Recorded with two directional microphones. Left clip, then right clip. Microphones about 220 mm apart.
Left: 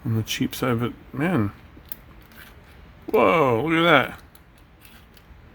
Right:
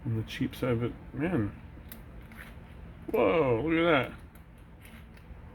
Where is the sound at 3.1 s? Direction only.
55° left (ahead or behind).